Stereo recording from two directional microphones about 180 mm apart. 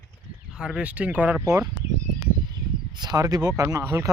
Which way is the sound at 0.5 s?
5° right (ahead or behind).